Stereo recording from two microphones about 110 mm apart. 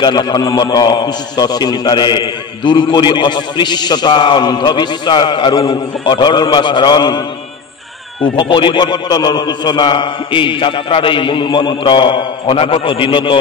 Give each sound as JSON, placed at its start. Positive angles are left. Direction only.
{"t": 0.0, "sound": "a man's voice", "side_deg": 40}
{"t": 8.4, "sound": "a man's voice", "side_deg": 50}